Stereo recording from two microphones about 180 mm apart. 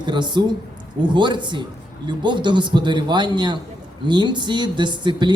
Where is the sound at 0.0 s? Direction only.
25° right (ahead or behind).